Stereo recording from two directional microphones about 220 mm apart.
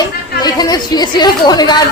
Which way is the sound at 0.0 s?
15° left (ahead or behind).